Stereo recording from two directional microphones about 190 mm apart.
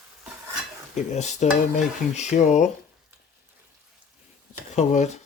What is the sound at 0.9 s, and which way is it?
Speech, 35° left (ahead or behind).